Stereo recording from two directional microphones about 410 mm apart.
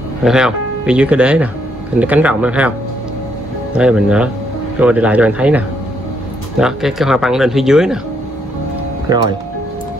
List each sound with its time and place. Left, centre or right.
0.2 s speech: centre
3.7 s speech: centre
6.6 s speech: centre
9.1 s speech: centre